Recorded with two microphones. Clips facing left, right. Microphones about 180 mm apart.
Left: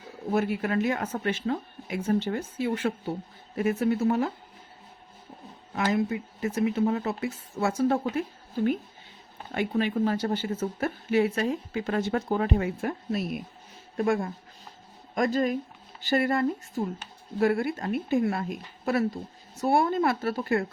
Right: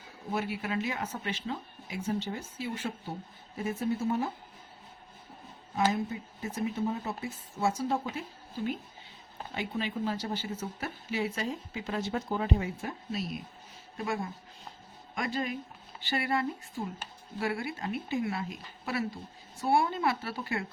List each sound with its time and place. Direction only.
0.3 s a woman's voice: 50° left (ahead or behind); by 4.3 s 70° left (ahead or behind)
5.7 s speech: 75° left (ahead or behind); by 8.2 s 60° left (ahead or behind)
9.5 s a woman's voice: 55° left (ahead or behind)